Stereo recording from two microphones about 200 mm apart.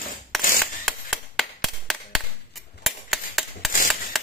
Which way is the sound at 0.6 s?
Centre (ahead or behind).